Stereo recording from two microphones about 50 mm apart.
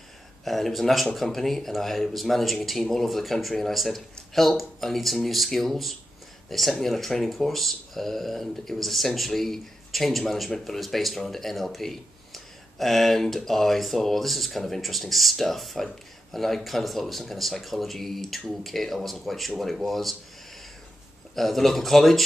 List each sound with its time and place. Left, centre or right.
0.5 s speech: centre
21.4 s speech: centre